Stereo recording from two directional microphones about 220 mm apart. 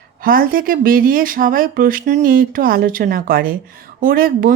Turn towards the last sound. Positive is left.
turn(degrees=-40)  # may be behind; listen again after turning